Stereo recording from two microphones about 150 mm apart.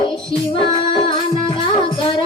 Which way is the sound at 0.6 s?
40° left (ahead or behind).